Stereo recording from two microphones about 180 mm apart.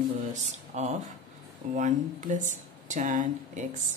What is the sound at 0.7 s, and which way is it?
Speech, 40° right (ahead or behind).